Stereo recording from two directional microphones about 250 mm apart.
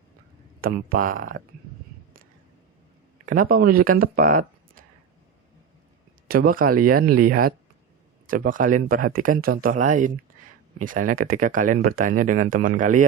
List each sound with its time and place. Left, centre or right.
0.6 s speech: right
3.2 s speech: right
6.2 s speech: right